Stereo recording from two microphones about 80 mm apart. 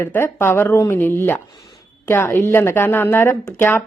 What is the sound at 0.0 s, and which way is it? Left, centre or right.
Speech, left.